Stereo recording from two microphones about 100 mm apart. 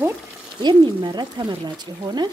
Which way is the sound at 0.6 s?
50° right (ahead or behind).